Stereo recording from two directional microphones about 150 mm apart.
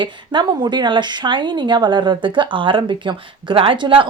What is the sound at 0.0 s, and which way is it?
Speech, 30° right (ahead or behind).